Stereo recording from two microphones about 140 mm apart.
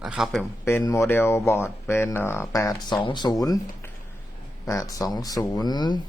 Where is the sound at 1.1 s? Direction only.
15° left (ahead or behind).